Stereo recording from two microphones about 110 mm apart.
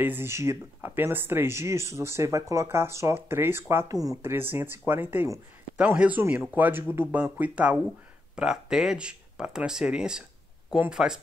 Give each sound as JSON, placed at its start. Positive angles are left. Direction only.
{"t": 0.0, "sound": "speech", "side_deg": -20}